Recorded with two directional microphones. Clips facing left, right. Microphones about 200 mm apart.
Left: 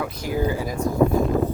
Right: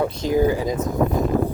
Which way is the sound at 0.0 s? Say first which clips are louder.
Right 6 dB; 25° right (ahead or behind).